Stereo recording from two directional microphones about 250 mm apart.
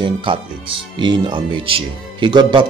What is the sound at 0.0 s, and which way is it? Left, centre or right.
Speech, right.